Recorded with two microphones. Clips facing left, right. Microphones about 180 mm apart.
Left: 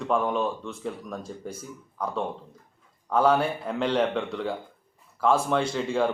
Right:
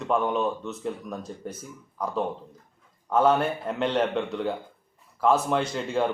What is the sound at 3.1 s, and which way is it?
A man's voice, centre (ahead or behind).